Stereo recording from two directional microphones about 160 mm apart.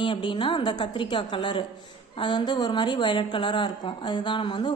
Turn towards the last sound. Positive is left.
turn(degrees=30)  # may be behind; listen again after turning